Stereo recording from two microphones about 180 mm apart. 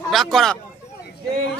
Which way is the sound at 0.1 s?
Centre (ahead or behind).